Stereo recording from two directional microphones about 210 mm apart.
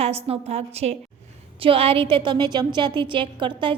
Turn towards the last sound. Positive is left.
turn(degrees=-25)  # may be behind; listen again after turning